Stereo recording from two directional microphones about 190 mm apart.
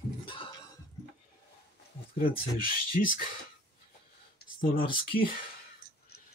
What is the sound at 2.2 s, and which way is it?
Speech, 50° left (ahead or behind).